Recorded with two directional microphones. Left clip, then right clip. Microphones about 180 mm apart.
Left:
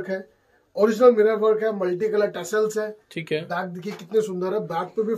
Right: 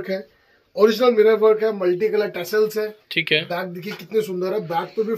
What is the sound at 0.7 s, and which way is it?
A man's voice, 50° right (ahead or behind).